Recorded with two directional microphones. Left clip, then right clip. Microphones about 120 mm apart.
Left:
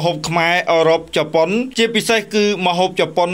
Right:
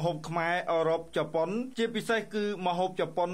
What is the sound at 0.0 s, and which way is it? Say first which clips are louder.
Speech: left 14 dB; 20° left (ahead or behind).